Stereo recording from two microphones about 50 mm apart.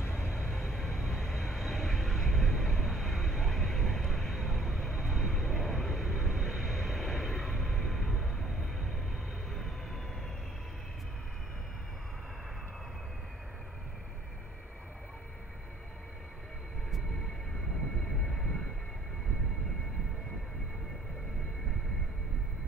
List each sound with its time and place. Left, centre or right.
0.3 s vehicle: centre